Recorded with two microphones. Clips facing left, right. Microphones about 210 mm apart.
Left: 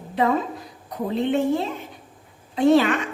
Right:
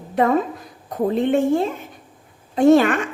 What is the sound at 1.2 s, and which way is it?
A woman's voice, 50° right (ahead or behind).